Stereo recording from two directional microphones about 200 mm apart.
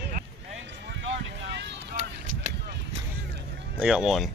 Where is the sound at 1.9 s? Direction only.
40° right (ahead or behind).